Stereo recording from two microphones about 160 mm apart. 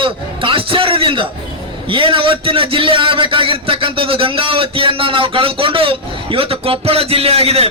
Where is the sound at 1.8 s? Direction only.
35° right (ahead or behind).